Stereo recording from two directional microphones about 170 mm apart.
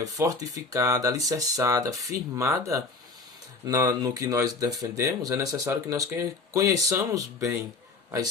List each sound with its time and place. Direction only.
0.0 s speech: 20° right (ahead or behind)